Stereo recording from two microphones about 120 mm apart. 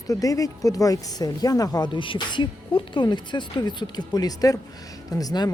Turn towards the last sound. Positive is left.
turn(degrees=35)  # may be behind; listen again after turning